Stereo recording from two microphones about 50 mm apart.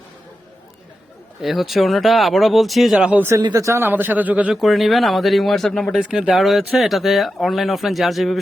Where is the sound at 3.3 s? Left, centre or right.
Right.